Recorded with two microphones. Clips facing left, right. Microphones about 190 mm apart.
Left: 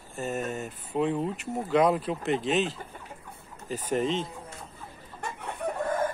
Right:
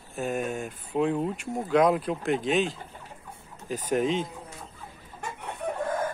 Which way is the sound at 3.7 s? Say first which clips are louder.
Right 2 dB; 10° right (ahead or behind).